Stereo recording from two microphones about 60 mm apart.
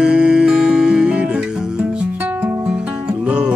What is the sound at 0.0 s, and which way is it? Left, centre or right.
Music, centre.